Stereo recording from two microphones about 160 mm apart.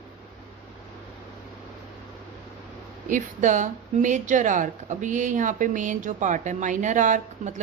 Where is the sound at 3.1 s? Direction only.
50° right (ahead or behind).